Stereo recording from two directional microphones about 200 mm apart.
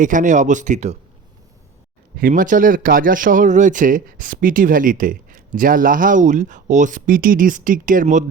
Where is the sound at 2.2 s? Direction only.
40° right (ahead or behind).